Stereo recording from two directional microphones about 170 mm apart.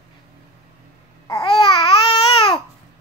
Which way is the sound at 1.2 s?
25° left (ahead or behind).